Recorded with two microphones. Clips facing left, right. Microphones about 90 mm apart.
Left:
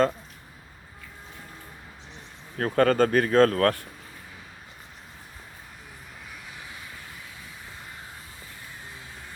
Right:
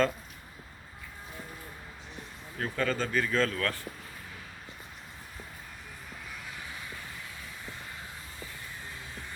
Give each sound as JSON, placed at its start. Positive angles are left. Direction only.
{"t": 2.6, "sound": "speech", "side_deg": 50}